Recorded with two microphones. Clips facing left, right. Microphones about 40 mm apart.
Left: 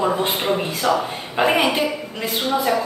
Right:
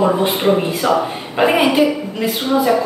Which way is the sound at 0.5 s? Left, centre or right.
Centre.